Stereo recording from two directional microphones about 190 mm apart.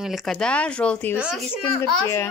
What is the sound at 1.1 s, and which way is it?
Speech, 5° right (ahead or behind).